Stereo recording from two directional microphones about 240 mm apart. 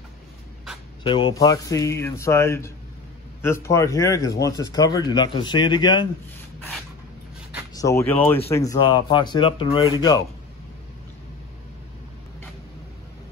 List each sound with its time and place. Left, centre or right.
1.0 s speech: centre
7.7 s speech: centre